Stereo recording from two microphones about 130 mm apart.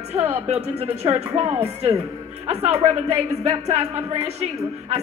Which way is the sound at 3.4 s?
55° right (ahead or behind).